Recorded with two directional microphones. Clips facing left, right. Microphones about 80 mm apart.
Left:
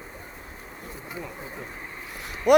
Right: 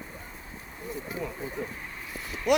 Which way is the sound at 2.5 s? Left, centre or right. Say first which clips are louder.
Left 7 dB; left.